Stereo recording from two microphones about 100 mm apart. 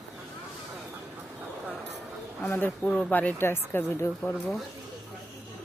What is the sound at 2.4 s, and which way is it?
Speech, 15° left (ahead or behind).